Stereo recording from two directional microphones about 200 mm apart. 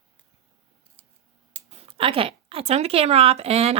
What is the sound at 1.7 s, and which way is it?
A woman's voice, 30° right (ahead or behind).